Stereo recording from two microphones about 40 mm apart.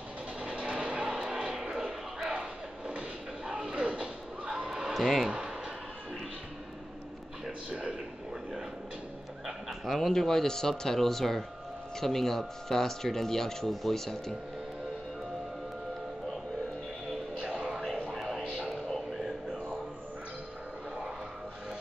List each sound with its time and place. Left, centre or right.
0.4 s music: right
3.4 s bow-wow: right
4.6 s fowl: centre
4.9 s speech: centre
9.8 s speech: centre
17.4 s music: right
18.1 s a sound: centre
19.1 s a sound: centre